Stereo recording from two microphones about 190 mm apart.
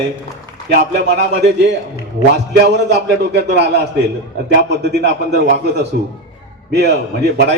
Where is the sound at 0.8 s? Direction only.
60° right (ahead or behind).